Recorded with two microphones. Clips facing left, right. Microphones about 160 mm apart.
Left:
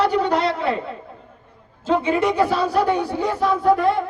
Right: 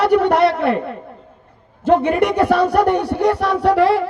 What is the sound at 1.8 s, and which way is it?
A man's voice, 60° right (ahead or behind).